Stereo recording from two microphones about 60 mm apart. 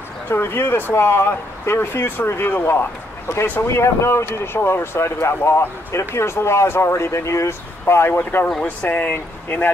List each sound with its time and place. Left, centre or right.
0.3 s speech: left
7.8 s speech: left